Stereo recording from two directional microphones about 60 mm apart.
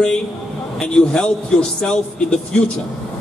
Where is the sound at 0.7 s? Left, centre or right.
Centre.